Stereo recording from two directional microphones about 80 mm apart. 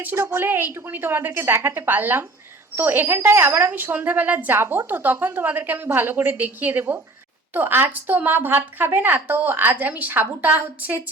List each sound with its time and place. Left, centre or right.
0.2 s a woman's voice: right